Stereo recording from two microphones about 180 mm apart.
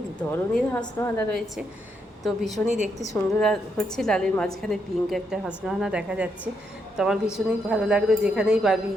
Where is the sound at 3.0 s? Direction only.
15° left (ahead or behind).